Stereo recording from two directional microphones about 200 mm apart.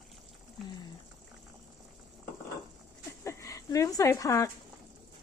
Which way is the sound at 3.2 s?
15° left (ahead or behind).